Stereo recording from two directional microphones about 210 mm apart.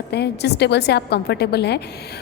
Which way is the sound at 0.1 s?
55° left (ahead or behind).